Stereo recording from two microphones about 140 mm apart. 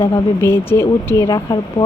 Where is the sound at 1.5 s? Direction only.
30° left (ahead or behind).